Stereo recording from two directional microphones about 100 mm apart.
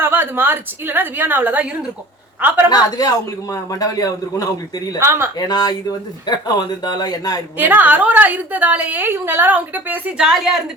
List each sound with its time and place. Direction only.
0.0 s a woman's voice: 20° right (ahead or behind)
2.6 s a man's voice: 40° left (ahead or behind)
4.9 s a woman's voice: 25° right (ahead or behind)
5.4 s a man's voice: 40° left (ahead or behind)
7.6 s a woman's voice: 20° right (ahead or behind)